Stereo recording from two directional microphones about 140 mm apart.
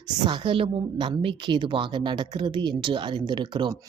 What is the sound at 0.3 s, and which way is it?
A woman's voice, 35° right (ahead or behind).